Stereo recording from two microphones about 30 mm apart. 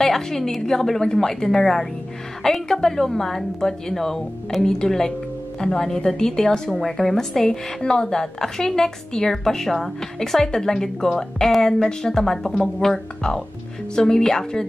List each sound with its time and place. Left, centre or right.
0.0 s speech: centre
0.6 s speech: centre
2.4 s a woman's voice: left
2.8 s a woman's voice: centre
6.8 s speech: centre
7.4 s a woman's voice: left